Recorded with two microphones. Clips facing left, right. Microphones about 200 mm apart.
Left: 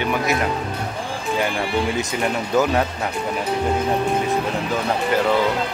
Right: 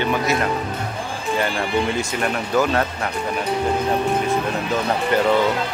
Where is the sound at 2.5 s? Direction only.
15° left (ahead or behind).